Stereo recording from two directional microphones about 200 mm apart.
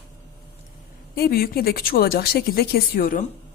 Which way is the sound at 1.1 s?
50° left (ahead or behind).